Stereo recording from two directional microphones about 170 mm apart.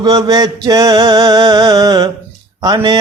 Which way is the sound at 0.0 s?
25° right (ahead or behind).